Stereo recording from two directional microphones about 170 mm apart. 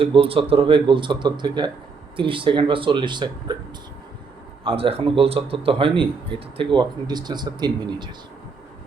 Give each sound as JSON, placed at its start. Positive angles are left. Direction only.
{"t": 0.0, "sound": "speech", "side_deg": -35}
{"t": 4.6, "sound": "speech", "side_deg": -35}